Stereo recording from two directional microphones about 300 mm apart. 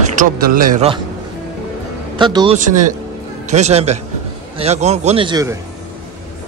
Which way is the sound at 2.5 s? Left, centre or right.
Right.